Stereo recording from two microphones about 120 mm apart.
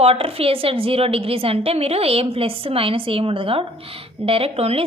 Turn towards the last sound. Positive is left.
turn(degrees=-55)  # may be behind; listen again after turning